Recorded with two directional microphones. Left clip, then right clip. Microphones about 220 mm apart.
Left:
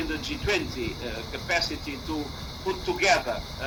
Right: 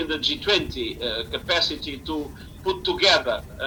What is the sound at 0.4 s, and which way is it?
Speech, 20° left (ahead or behind).